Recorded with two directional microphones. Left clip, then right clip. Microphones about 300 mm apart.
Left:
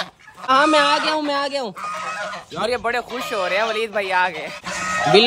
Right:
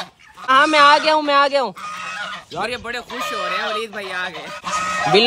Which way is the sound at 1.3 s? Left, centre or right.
Centre.